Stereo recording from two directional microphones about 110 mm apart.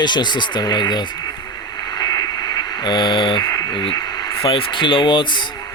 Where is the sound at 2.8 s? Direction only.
45° left (ahead or behind).